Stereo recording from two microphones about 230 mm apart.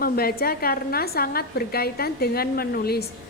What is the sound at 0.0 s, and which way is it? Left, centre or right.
A woman's voice, left.